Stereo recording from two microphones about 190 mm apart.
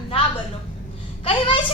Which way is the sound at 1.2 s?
30° left (ahead or behind).